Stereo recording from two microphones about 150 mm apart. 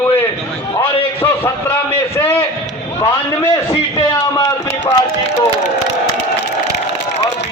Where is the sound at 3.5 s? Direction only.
25° left (ahead or behind).